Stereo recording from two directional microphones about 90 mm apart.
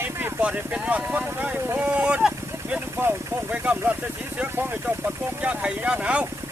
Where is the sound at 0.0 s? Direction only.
20° right (ahead or behind).